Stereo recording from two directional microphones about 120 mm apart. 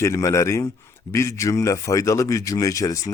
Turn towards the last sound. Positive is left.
turn(degrees=30)  # may be behind; listen again after turning